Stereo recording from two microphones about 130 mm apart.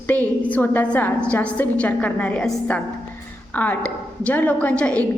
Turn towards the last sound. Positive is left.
turn(degrees=10)  # may be behind; listen again after turning